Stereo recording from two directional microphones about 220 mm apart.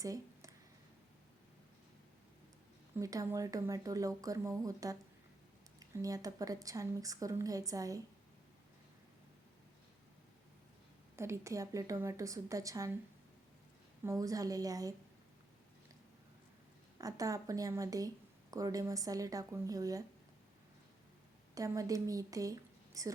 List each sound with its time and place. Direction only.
0.0 s a sound: 15° right (ahead or behind)
3.0 s a woman's voice: 15° right (ahead or behind)
11.2 s a woman's voice: 15° right (ahead or behind)
14.0 s a woman's voice: 15° right (ahead or behind)
17.0 s a woman's voice: 15° right (ahead or behind)
21.5 s a woman's voice: 15° right (ahead or behind)